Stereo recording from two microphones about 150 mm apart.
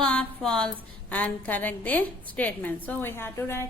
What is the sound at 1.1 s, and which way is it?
A woman's voice, 10° left (ahead or behind).